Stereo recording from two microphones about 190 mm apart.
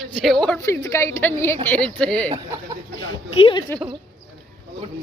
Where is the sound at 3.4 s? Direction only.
25° left (ahead or behind).